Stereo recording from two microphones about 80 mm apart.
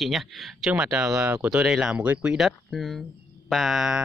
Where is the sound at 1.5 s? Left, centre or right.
Centre.